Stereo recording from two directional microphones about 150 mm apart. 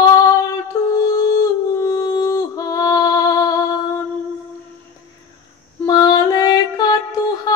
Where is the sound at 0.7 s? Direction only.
20° left (ahead or behind).